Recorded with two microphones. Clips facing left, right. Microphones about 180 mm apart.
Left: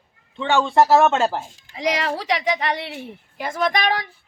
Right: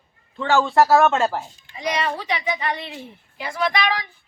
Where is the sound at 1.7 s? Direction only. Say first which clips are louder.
Left 2 dB; 90° left; by 3.4 s 65° left (ahead or behind).